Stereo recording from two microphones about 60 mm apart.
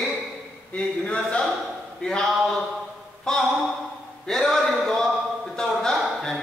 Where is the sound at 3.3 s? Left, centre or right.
Centre.